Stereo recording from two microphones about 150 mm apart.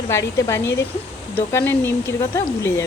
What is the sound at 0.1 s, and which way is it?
Speech, 20° left (ahead or behind).